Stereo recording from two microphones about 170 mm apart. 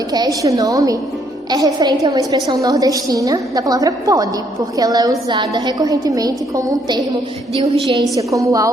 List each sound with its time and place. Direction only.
0.1 s a woman's voice: 20° right (ahead or behind)
8.1 s a woman's voice: 20° right (ahead or behind)